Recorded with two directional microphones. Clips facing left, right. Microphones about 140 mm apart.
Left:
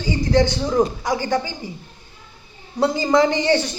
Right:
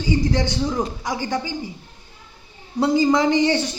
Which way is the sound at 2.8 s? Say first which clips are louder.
Even; 20° right (ahead or behind).